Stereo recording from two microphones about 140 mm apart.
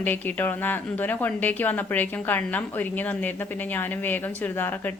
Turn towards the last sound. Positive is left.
turn(degrees=15)  # may be behind; listen again after turning